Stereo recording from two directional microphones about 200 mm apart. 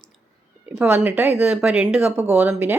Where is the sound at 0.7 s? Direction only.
10° right (ahead or behind).